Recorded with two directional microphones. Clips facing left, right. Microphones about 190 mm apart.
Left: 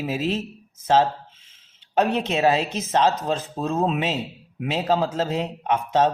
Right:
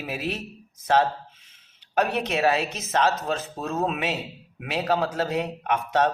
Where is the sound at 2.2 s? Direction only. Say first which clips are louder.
Left 2 dB; 25° left (ahead or behind).